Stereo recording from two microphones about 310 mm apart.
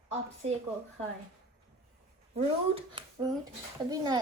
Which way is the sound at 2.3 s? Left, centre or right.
Centre.